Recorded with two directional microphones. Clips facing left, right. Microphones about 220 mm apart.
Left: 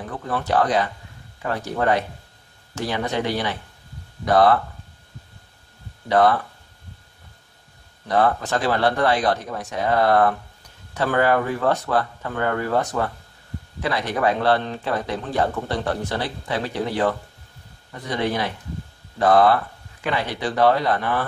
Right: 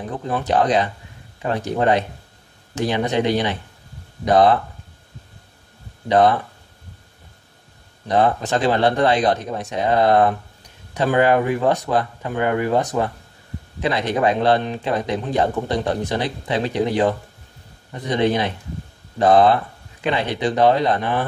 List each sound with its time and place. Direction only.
0.0 s a man's voice: 20° right (ahead or behind)
6.0 s a man's voice: 20° right (ahead or behind)
8.1 s a man's voice: 20° right (ahead or behind)